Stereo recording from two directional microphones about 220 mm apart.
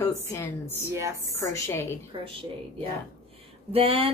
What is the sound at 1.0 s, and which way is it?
Speech, 15° right (ahead or behind).